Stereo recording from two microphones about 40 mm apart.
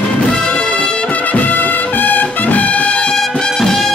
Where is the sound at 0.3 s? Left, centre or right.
Left.